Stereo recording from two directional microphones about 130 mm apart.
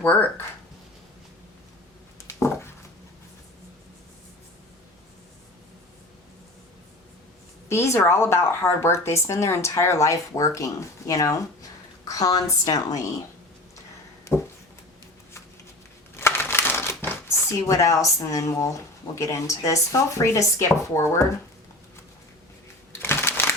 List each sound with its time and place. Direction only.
0.0 s speech: 15° left (ahead or behind)
2.2 s a sound: 20° left (ahead or behind)
7.7 s a woman's voice: 20° left (ahead or behind)
16.1 s speech: 20° left (ahead or behind)
23.0 s crumpling: 15° left (ahead or behind)